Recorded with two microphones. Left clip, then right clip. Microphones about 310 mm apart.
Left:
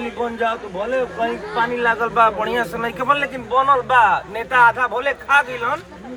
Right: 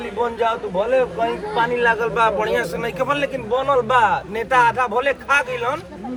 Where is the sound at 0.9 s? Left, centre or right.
Centre.